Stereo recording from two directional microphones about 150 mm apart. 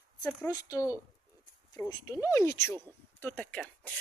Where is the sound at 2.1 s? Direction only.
20° left (ahead or behind).